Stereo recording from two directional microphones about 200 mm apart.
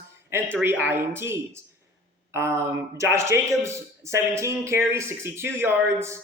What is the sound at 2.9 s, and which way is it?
A man's voice, 15° right (ahead or behind).